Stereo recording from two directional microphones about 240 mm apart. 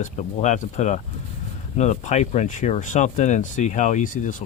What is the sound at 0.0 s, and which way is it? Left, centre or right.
Speech, left.